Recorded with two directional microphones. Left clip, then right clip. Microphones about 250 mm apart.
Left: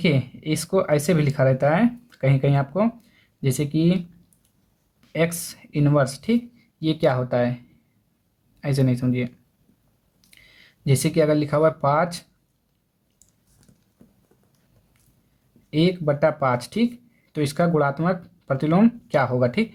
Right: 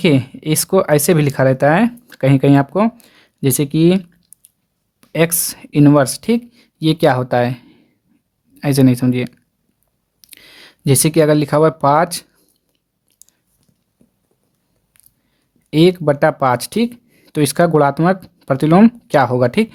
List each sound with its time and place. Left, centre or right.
0.0 s speech: right
13.2 s a sound: right
15.7 s speech: right